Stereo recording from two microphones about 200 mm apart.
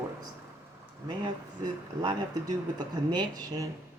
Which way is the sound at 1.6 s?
20° right (ahead or behind).